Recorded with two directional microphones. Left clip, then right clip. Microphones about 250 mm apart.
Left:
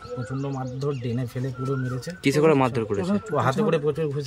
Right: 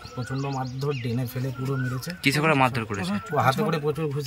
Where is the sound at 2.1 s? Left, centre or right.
Centre.